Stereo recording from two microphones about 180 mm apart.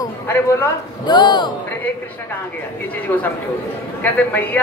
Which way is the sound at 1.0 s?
25° left (ahead or behind).